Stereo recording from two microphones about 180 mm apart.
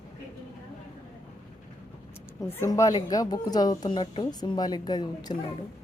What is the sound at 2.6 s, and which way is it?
A woman's voice, 15° left (ahead or behind).